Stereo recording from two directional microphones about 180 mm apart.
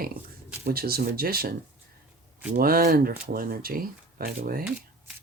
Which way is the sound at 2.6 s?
55° right (ahead or behind).